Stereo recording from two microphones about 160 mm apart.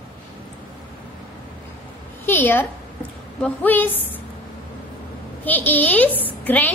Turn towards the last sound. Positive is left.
turn(degrees=10)  # may be behind; listen again after turning